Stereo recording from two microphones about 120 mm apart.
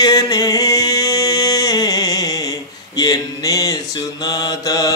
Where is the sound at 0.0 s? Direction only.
30° left (ahead or behind).